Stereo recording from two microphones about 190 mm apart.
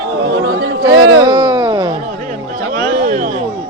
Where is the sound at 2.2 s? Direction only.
45° right (ahead or behind).